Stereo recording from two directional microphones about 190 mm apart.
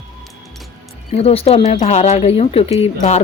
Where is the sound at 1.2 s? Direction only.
30° left (ahead or behind).